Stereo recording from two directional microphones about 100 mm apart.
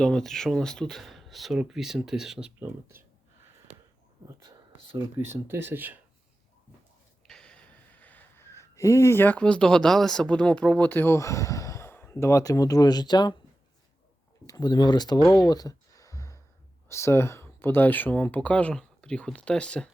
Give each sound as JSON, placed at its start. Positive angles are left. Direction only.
{"t": 0.0, "sound": "speech", "side_deg": 5}
{"t": 2.6, "sound": "speech", "side_deg": -25}
{"t": 5.1, "sound": "speech", "side_deg": -25}
{"t": 7.3, "sound": "speech", "side_deg": 10}
{"t": 14.4, "sound": "speech", "side_deg": 40}
{"t": 15.4, "sound": "a sound", "side_deg": 40}
{"t": 16.9, "sound": "speech", "side_deg": 25}